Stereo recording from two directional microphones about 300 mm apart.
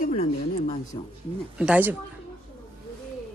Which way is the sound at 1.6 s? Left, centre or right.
Centre.